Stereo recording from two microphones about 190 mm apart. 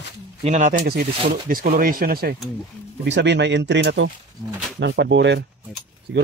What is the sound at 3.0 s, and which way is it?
Speech, 70° right (ahead or behind).